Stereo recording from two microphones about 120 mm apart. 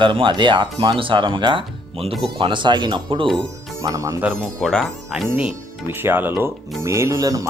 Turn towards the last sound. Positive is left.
turn(degrees=-30)  # may be behind; listen again after turning